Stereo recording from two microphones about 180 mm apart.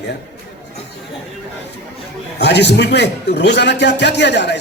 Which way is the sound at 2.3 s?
70° left (ahead or behind).